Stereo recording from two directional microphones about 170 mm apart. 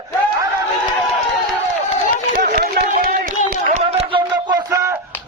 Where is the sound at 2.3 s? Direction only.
60° right (ahead or behind).